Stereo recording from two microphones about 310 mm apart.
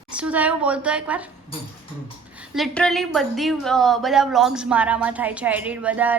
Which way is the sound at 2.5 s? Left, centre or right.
Centre.